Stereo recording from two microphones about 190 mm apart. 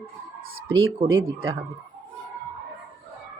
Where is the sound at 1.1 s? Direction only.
70° right (ahead or behind).